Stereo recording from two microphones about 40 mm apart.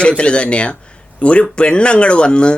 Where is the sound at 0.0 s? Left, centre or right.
Left.